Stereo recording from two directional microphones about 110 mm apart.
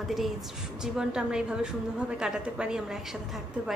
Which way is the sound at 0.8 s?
5° right (ahead or behind).